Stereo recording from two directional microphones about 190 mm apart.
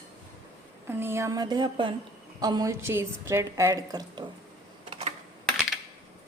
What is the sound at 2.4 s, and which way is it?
A woman's voice, 20° right (ahead or behind).